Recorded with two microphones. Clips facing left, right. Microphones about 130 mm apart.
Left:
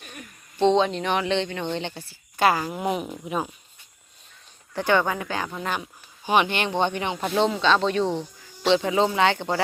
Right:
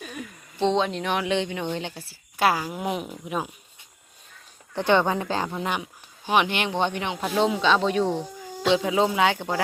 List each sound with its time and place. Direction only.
0.6 s a woman's voice: centre (ahead or behind)
4.7 s speech: 25° right (ahead or behind)
5.5 s speech: 15° right (ahead or behind)
6.2 s a woman's voice: centre (ahead or behind)